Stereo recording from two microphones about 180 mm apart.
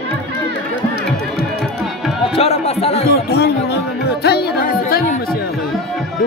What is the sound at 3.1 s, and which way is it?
Speech, 65° left (ahead or behind).